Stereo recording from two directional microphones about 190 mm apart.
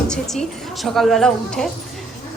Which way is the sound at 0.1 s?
Centre (ahead or behind).